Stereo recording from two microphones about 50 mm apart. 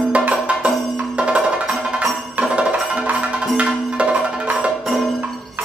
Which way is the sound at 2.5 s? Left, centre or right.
Right.